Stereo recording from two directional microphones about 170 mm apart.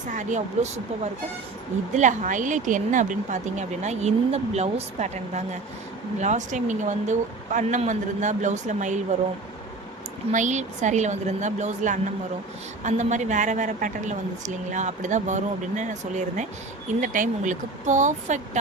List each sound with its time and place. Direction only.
0.1 s a woman's voice: 45° right (ahead or behind)
10.3 s a woman's voice: 45° right (ahead or behind)